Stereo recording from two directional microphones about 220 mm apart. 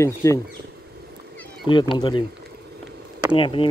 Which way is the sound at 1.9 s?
20° left (ahead or behind).